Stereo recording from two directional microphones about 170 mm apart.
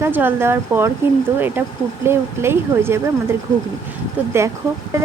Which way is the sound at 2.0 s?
15° right (ahead or behind).